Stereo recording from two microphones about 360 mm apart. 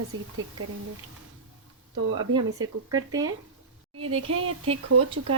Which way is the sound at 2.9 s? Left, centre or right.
Centre.